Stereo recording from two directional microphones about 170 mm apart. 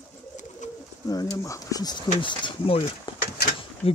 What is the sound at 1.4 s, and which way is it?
Speech, 20° left (ahead or behind).